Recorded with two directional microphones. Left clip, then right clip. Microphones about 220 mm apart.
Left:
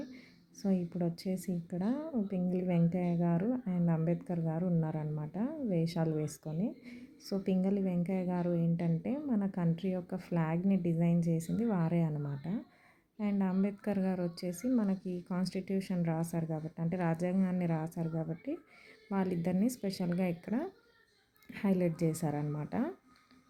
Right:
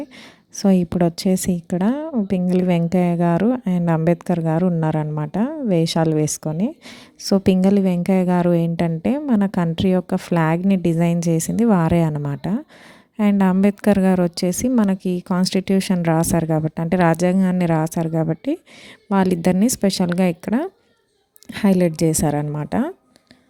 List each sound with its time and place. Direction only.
0.5 s a woman's voice: 45° right (ahead or behind)